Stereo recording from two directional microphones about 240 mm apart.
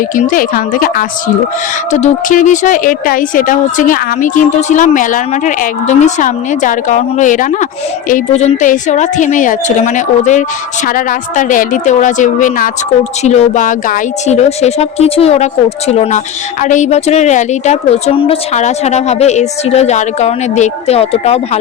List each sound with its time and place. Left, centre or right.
0.2 s a woman's voice: left